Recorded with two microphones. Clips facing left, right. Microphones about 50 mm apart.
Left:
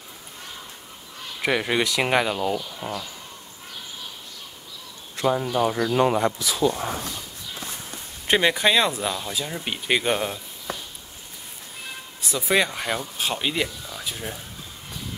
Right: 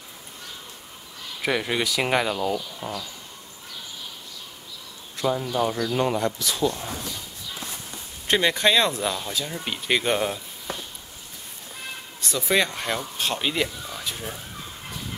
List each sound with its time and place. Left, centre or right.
1.4 s speech: centre
5.2 s speech: centre
6.4 s speech: centre
8.3 s speech: centre
12.2 s speech: centre